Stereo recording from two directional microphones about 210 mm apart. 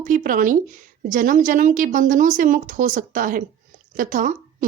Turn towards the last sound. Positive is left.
turn(degrees=-40)  # may be behind; listen again after turning